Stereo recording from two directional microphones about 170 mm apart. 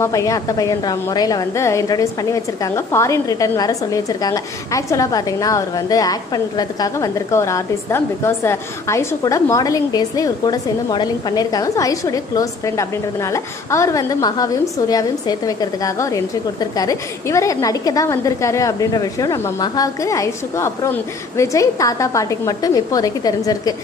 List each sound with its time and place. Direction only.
0.0 s a woman's voice: 20° left (ahead or behind)